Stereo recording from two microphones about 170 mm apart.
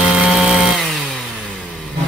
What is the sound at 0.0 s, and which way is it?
Chainsaw, 5° right (ahead or behind).